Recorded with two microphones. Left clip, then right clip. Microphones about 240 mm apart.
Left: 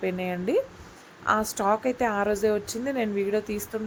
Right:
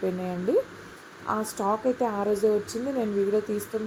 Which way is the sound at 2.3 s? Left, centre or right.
Centre.